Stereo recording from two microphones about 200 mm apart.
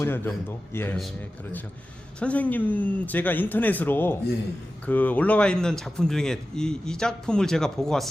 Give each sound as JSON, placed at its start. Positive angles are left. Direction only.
{"t": 0.0, "sound": "speech", "side_deg": 10}
{"t": 2.1, "sound": "speech", "side_deg": 5}